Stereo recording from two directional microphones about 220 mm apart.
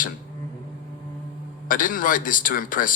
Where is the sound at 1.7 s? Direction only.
40° left (ahead or behind).